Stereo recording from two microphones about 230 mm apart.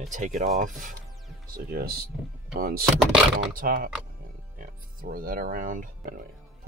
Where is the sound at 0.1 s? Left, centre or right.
Right.